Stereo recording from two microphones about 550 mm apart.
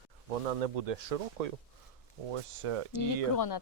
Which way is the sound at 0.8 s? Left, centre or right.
Right.